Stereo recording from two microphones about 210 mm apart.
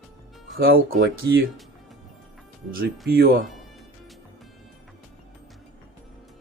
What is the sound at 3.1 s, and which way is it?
Speech, 50° right (ahead or behind).